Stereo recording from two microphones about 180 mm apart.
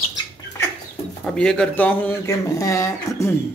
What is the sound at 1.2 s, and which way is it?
Speech, 5° left (ahead or behind).